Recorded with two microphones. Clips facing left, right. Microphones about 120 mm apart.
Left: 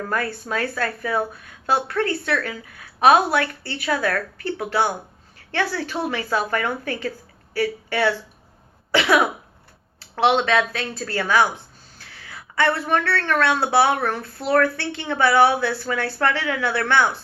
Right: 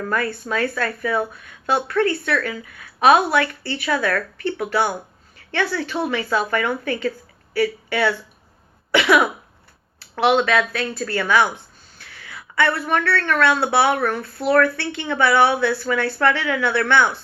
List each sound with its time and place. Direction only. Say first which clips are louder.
0.1 s a woman's voice: right 2 dB; 35° left (ahead or behind)
8.9 s cough: right 2 dB; 35° left (ahead or behind)
10.2 s a woman's voice: right 1 dB; 30° left (ahead or behind)